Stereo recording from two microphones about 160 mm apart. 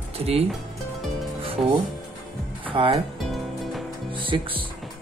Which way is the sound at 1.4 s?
35° right (ahead or behind).